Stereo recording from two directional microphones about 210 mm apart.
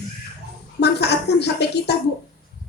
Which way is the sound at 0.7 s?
50° left (ahead or behind).